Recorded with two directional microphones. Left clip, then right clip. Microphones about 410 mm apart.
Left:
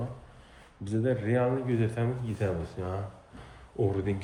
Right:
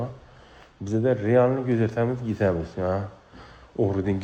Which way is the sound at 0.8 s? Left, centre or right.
Centre.